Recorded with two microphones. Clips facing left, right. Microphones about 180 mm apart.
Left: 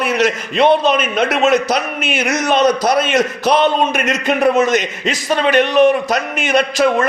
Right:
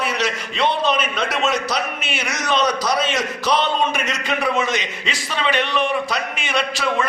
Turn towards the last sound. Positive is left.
turn(degrees=45)  # may be behind; listen again after turning